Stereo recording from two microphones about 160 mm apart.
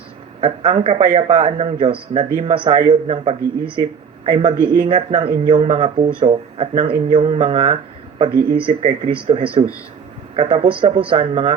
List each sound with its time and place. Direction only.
0.4 s a man's voice: 35° right (ahead or behind)